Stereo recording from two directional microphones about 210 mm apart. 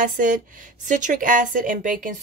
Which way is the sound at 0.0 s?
40° right (ahead or behind).